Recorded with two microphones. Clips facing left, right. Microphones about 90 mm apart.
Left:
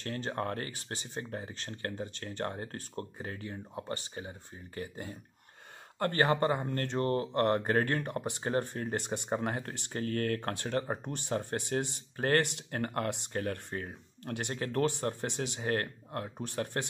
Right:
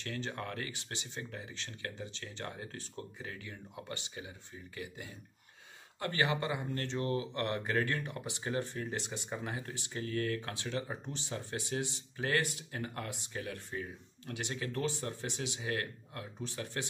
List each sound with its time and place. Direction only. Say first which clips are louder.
0.0 s speech: left 5 dB; 40° left (ahead or behind)